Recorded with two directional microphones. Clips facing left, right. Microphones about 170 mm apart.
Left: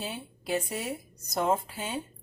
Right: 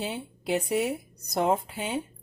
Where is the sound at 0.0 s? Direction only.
25° right (ahead or behind).